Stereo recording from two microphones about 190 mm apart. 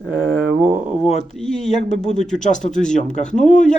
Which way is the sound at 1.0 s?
35° left (ahead or behind).